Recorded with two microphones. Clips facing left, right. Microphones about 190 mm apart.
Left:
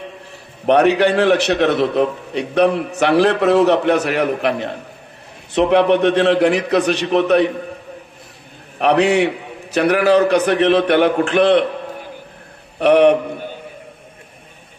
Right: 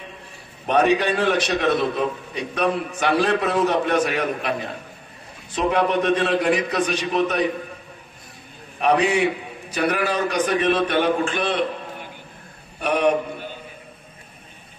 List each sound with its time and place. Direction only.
0.7 s a man's voice: 70° left (ahead or behind)
8.7 s a man's voice: 65° left (ahead or behind)
12.7 s a man's voice: 70° left (ahead or behind)